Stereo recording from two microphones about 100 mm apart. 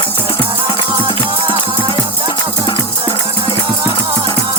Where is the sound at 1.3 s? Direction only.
60° right (ahead or behind).